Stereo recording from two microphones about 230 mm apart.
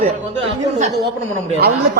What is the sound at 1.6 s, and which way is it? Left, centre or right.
Speech, right.